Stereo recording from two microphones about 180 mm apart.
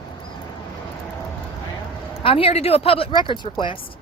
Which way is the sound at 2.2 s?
30° left (ahead or behind).